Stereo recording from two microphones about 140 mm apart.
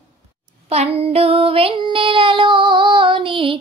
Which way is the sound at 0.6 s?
45° right (ahead or behind).